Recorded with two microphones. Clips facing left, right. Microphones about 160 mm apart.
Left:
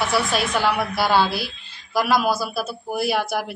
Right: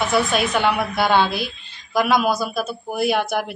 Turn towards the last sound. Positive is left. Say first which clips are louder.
# right 2 dB
turn(degrees=5)  # may be behind; listen again after turning